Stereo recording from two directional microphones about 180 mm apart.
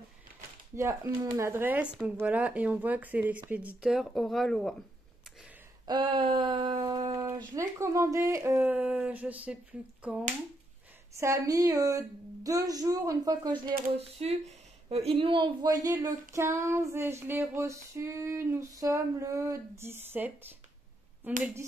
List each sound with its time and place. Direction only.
0.7 s speech: 20° right (ahead or behind); by 4.7 s centre (ahead or behind)
5.9 s speech: 25° right (ahead or behind); by 10.2 s 5° right (ahead or behind)
11.1 s speech: 20° right (ahead or behind)